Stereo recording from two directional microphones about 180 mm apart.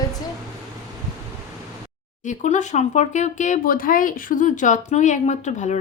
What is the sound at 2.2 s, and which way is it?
Speech, 40° left (ahead or behind).